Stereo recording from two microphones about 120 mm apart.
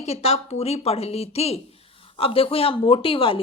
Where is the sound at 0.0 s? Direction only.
60° left (ahead or behind).